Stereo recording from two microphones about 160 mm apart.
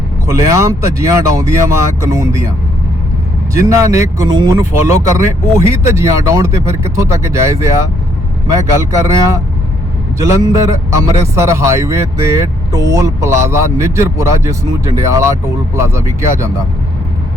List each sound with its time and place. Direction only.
0.3 s a man's voice: 20° right (ahead or behind)
3.5 s a man's voice: 20° right (ahead or behind)